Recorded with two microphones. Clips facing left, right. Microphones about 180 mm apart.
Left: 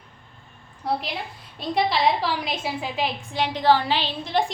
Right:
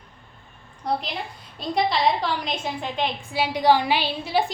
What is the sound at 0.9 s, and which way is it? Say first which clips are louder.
A woman's voice: even; 5° left (ahead or behind).